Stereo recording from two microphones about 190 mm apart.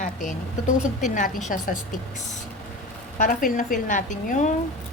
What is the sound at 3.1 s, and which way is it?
A woman's voice, 45° left (ahead or behind).